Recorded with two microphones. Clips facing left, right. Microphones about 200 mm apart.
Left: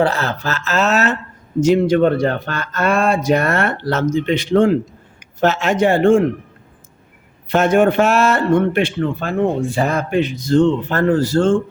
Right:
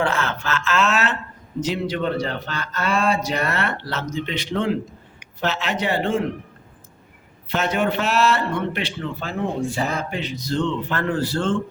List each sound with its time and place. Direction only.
0.0 s speech: 35° left (ahead or behind)
7.4 s speech: 50° left (ahead or behind)